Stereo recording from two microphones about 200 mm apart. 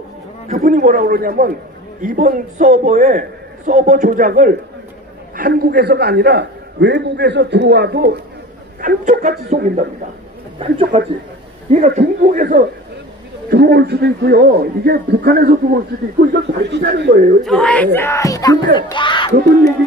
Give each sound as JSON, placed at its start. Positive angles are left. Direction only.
{"t": 0.5, "sound": "a man's voice", "side_deg": -40}
{"t": 8.8, "sound": "a man's voice", "side_deg": -40}
{"t": 10.9, "sound": "a man's voice", "side_deg": -30}
{"t": 13.5, "sound": "a man's voice", "side_deg": -55}
{"t": 17.5, "sound": "speech", "side_deg": 5}